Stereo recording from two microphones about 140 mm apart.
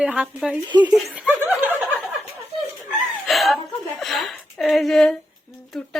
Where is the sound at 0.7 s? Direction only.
30° right (ahead or behind).